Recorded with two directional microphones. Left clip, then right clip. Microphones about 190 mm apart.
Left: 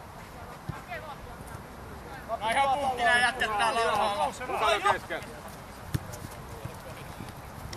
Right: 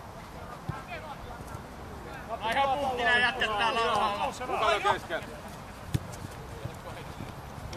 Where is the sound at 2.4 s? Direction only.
30° left (ahead or behind).